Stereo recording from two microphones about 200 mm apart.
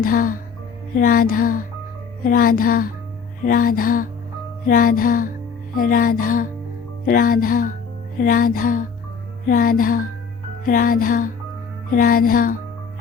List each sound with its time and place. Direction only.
0.0 s music: 45° left (ahead or behind)